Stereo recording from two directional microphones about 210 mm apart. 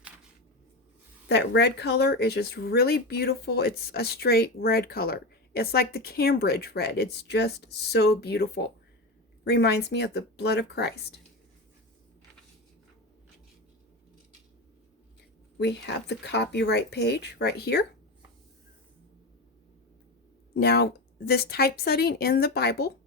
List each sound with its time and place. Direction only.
1.3 s speech: 55° left (ahead or behind)
15.5 s speech: 55° left (ahead or behind)
20.5 s speech: 50° left (ahead or behind)